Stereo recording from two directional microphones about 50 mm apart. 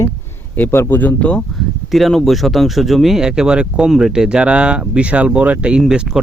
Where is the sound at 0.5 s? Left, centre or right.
Left.